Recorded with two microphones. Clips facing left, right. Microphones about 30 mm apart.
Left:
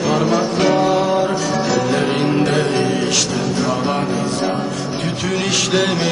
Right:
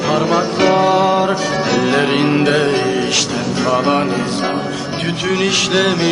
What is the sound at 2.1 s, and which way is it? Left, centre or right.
Music, right.